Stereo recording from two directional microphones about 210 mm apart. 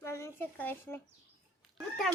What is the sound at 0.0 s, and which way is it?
Speech, 10° left (ahead or behind).